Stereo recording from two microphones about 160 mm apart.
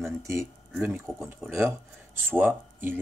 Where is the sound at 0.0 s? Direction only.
15° right (ahead or behind).